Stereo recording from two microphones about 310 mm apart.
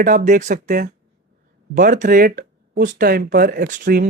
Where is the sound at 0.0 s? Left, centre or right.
Right.